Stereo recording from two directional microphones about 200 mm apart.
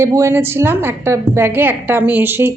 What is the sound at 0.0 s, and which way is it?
A woman's voice, 15° right (ahead or behind).